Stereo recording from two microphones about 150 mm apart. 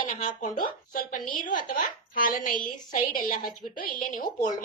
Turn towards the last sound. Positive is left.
turn(degrees=65)  # may be behind; listen again after turning